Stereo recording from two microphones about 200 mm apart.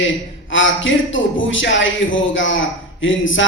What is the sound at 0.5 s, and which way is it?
A man's voice, 70° left (ahead or behind).